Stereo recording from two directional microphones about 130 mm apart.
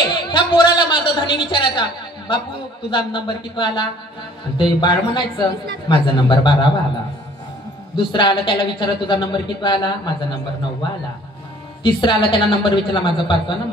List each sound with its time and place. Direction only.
0.1 s a sound: 35° left (ahead or behind)
2.9 s a man's voice: 35° left (ahead or behind)
7.9 s a man's voice: 40° left (ahead or behind)
11.8 s a man's voice: 40° left (ahead or behind)